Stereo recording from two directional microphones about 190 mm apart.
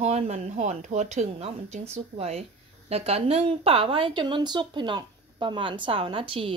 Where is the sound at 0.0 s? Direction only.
35° right (ahead or behind).